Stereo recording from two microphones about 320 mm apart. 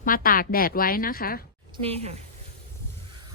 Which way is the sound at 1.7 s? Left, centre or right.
Centre.